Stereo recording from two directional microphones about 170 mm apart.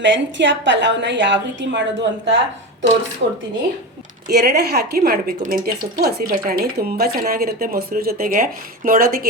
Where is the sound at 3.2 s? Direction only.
65° right (ahead or behind).